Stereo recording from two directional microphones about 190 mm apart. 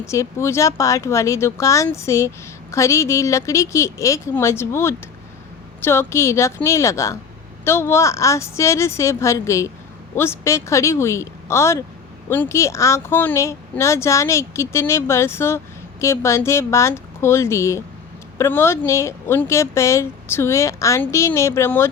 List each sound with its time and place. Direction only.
0.0 s speech: 15° left (ahead or behind)